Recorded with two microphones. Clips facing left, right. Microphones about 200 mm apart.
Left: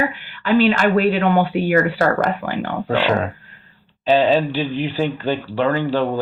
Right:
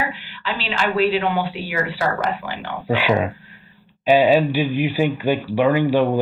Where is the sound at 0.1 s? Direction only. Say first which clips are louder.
Left 10 dB; 50° left (ahead or behind).